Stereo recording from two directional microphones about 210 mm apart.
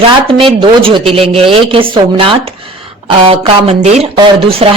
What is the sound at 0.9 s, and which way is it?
A woman's voice, 25° right (ahead or behind).